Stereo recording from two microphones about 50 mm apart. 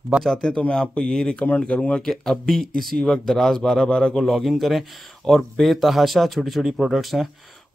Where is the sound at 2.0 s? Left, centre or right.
Centre.